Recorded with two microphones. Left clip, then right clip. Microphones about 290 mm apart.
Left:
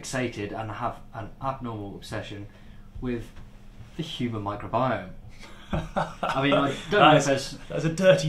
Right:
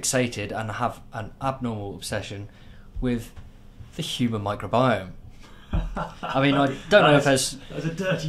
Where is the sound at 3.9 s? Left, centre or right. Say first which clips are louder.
Right 4 dB; right.